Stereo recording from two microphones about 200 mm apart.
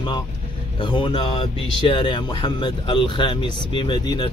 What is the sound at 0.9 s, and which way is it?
A man's voice, 25° left (ahead or behind).